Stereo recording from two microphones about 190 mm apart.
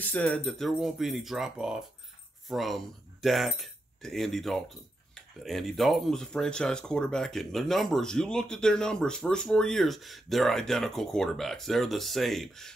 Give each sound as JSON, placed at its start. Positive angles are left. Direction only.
{"t": 0.0, "sound": "speech", "side_deg": 5}